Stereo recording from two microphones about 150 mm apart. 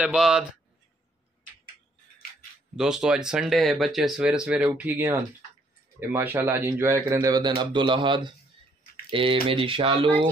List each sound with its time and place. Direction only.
0.0 s speech: 5° right (ahead or behind)
2.8 s a man's voice: 5° right (ahead or behind); by 10.1 s 35° right (ahead or behind)